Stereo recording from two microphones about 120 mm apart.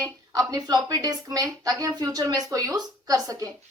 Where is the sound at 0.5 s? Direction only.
30° right (ahead or behind).